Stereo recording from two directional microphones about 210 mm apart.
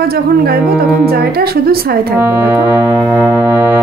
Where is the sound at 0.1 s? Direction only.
45° right (ahead or behind).